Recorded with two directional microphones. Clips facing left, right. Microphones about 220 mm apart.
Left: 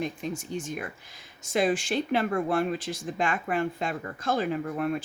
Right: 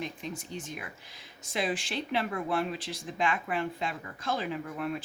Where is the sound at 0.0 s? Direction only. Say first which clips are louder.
Left 6 dB; 45° left (ahead or behind).